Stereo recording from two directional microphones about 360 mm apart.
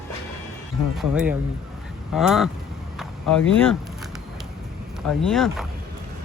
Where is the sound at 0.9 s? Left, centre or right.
Centre.